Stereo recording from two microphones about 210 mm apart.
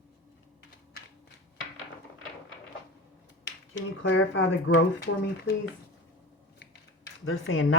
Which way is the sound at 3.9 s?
65° left (ahead or behind).